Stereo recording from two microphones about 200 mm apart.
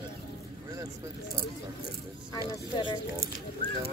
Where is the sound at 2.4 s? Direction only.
20° left (ahead or behind).